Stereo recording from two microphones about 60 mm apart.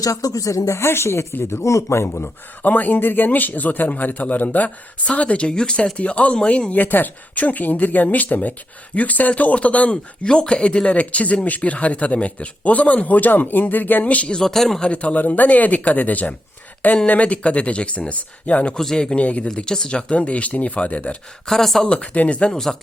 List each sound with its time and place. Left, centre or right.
0.0 s speech: left
1.3 s speech: left
1.6 s speech: left
2.6 s a man's voice: left
10.2 s a man's voice: centre
14.3 s a man's voice: centre
14.8 s a man's voice: left
18.8 s a man's voice: centre
21.4 s speech: centre
21.8 s a man's voice: centre